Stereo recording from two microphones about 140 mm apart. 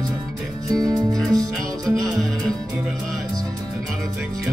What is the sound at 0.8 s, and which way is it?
Music, 30° right (ahead or behind).